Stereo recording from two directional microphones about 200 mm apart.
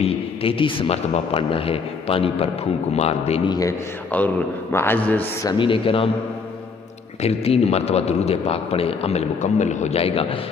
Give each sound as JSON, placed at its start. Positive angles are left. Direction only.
{"t": 0.0, "sound": "a man's voice", "side_deg": 30}
{"t": 3.6, "sound": "a man's voice", "side_deg": 10}
{"t": 5.5, "sound": "speech", "side_deg": 25}
{"t": 7.2, "sound": "a man's voice", "side_deg": 30}